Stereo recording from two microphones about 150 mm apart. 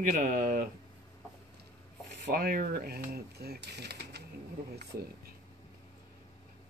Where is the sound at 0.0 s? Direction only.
65° right (ahead or behind).